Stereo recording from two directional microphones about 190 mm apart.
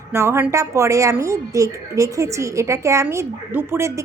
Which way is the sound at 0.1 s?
15° right (ahead or behind).